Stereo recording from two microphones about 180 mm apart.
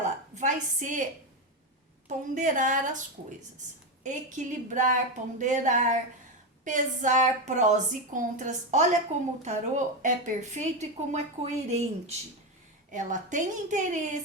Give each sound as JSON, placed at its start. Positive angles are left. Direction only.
{"t": 0.3, "sound": "a woman's voice", "side_deg": -45}
{"t": 2.0, "sound": "a woman's voice", "side_deg": -45}